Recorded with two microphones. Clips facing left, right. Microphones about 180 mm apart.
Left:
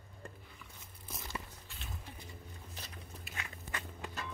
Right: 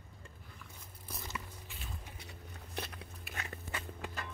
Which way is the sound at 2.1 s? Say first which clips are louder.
Even; 70° right (ahead or behind).